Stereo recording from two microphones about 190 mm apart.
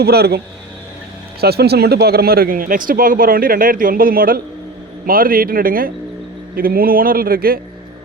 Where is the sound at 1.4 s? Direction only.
55° right (ahead or behind).